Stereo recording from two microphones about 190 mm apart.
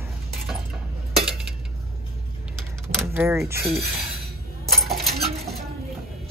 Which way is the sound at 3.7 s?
Centre (ahead or behind).